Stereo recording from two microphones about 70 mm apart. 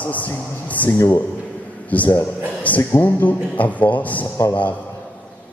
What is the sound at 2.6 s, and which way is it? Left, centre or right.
Speech, left.